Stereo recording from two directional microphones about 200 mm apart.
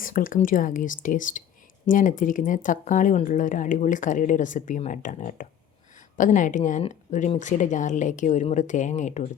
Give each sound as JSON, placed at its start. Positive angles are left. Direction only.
{"t": 0.0, "sound": "speech", "side_deg": 45}